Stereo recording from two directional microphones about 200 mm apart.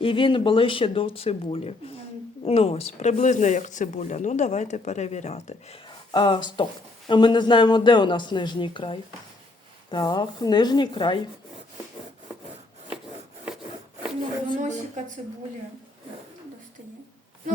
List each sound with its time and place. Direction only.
0.0 s speech: 25° left (ahead or behind)
14.6 s speech: 35° right (ahead or behind)